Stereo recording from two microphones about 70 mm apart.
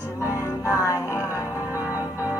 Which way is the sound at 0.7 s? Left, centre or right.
Left.